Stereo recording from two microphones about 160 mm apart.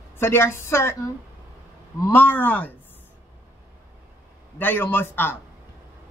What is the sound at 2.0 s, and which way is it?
Speech, 10° left (ahead or behind).